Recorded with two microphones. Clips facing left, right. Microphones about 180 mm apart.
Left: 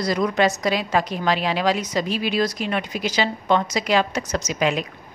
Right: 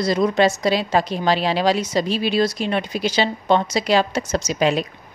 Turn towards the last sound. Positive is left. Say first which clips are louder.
# right 3 dB
turn(degrees=-30)  # may be behind; listen again after turning